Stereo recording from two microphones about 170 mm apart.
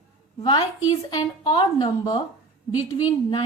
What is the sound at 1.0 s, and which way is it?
A woman's voice, 25° left (ahead or behind).